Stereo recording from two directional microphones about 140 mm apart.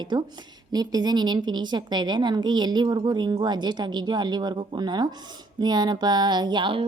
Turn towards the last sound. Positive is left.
turn(degrees=-35)  # may be behind; listen again after turning